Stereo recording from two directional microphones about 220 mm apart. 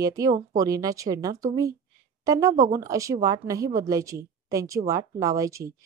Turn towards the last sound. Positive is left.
turn(degrees=-15)  # may be behind; listen again after turning